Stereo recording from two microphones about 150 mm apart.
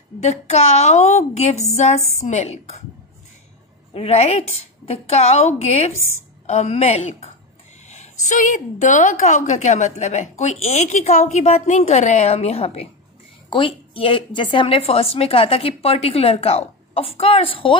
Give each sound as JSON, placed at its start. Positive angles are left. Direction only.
{"t": 0.2, "sound": "a woman's voice", "side_deg": 50}
{"t": 3.9, "sound": "a woman's voice", "side_deg": 45}